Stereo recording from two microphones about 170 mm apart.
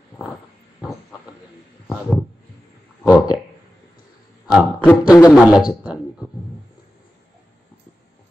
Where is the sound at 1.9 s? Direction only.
Centre (ahead or behind).